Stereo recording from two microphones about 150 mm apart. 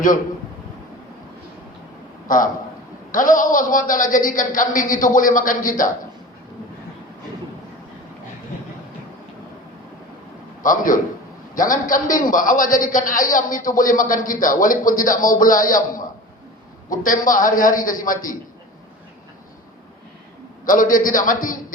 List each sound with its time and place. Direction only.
2.2 s a man's voice: 65° left (ahead or behind)
10.6 s a man's voice: 65° left (ahead or behind)
20.7 s a man's voice: 65° left (ahead or behind)